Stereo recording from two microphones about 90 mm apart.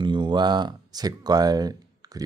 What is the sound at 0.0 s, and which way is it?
Speech, 60° right (ahead or behind).